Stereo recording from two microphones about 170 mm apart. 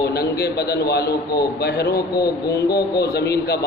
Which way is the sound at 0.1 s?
70° left (ahead or behind).